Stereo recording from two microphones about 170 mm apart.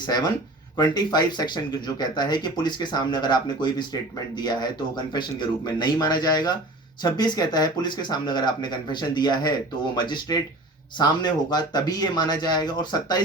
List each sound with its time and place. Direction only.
0.0 s speech: 25° left (ahead or behind)